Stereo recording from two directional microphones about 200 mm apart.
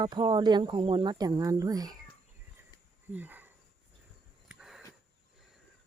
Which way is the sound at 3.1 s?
10° right (ahead or behind).